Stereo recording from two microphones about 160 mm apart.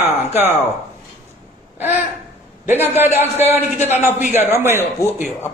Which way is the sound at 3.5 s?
45° left (ahead or behind).